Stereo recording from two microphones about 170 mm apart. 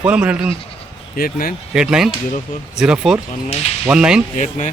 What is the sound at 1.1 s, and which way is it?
Speech, 60° left (ahead or behind).